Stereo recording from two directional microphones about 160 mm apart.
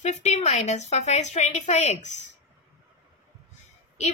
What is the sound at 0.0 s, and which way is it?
A woman's voice, 45° left (ahead or behind).